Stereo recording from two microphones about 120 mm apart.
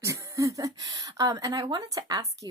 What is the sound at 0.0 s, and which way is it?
Speech, 25° right (ahead or behind).